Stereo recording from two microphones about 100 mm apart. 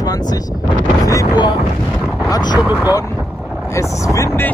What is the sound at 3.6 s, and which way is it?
Vehicle, 30° left (ahead or behind).